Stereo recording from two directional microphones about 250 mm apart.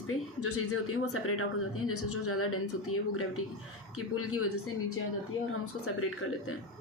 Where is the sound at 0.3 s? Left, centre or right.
Left.